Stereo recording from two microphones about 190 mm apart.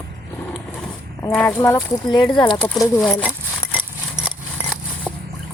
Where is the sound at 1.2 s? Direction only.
5° left (ahead or behind).